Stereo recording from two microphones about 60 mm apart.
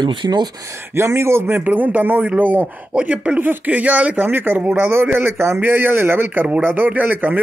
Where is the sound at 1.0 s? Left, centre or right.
Right.